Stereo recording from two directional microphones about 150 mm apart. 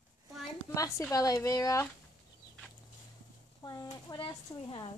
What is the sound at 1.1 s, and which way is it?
Speech, 25° left (ahead or behind).